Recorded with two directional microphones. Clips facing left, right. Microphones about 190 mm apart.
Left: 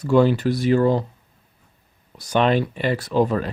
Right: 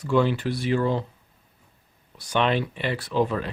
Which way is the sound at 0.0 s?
40° left (ahead or behind).